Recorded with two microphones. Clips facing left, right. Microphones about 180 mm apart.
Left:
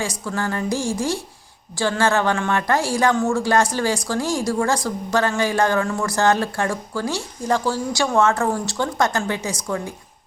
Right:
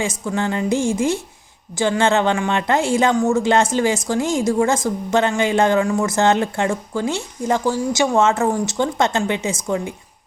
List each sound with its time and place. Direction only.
0.0 s a woman's voice: 20° right (ahead or behind)